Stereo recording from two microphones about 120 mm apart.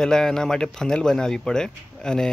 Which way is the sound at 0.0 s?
5° left (ahead or behind).